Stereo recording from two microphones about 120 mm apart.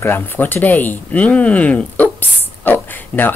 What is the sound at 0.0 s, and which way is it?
Speech, 15° left (ahead or behind).